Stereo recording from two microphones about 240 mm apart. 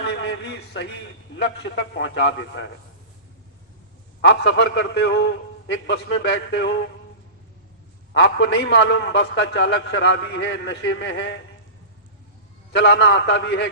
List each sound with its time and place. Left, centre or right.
0.1 s a sound: left
1.4 s a man's voice: left
4.2 s a man's voice: left
8.1 s a man's voice: left
12.7 s a man's voice: left